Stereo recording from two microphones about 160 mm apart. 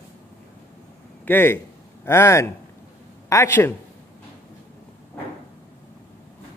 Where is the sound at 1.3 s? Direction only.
15° left (ahead or behind).